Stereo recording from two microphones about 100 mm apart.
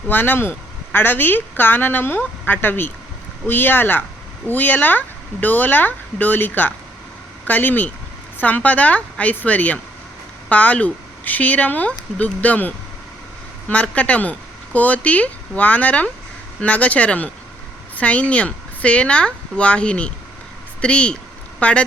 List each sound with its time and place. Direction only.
0.1 s speech: 20° left (ahead or behind)